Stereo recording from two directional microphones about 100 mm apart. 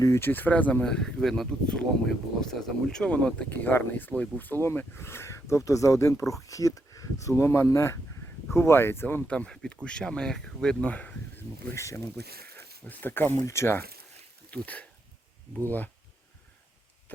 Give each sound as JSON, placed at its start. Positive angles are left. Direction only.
{"t": 0.0, "sound": "speech", "side_deg": 25}
{"t": 9.3, "sound": "speech", "side_deg": 10}
{"t": 11.7, "sound": "speech", "side_deg": 30}
{"t": 12.8, "sound": "speech", "side_deg": 15}
{"t": 14.5, "sound": "speech", "side_deg": 15}